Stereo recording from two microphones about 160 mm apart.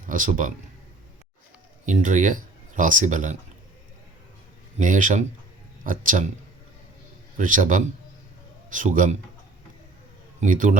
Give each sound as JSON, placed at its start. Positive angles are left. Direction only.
{"t": 0.1, "sound": "a man's voice", "side_deg": -55}
{"t": 1.9, "sound": "speech", "side_deg": -50}
{"t": 4.8, "sound": "a man's voice", "side_deg": -55}
{"t": 7.3, "sound": "a man's voice", "side_deg": -55}
{"t": 10.4, "sound": "a man's voice", "side_deg": -55}